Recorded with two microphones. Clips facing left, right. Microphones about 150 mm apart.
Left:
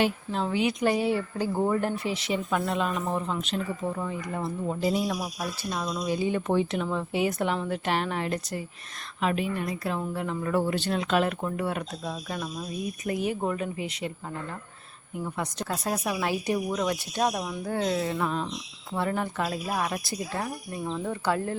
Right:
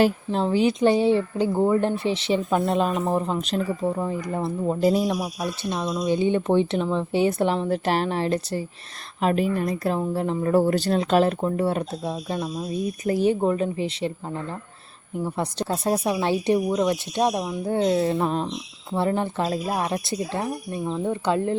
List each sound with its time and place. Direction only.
0.0 s speech: 35° right (ahead or behind)
1.5 s speech: 15° right (ahead or behind)
1.8 s speech: 30° right (ahead or behind)
5.1 s speech: 15° right (ahead or behind)